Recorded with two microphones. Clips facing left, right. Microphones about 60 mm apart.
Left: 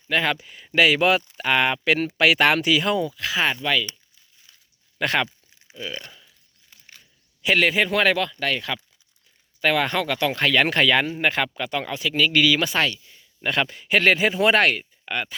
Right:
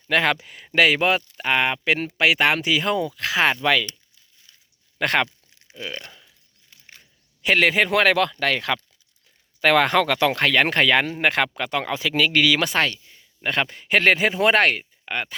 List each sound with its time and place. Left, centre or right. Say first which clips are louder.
0.1 s speech: right 2 dB; right
0.9 s speech: left 1 dB; right
2.9 s speech: right 1 dB; right
4.9 s speech: right 2 dB; right
5.5 s a sound: even; centre
7.6 s speech: right 2 dB; right
9.6 s speech: right 4 dB; right
10.4 s speech: left 3 dB; right
13.4 s speech: even; right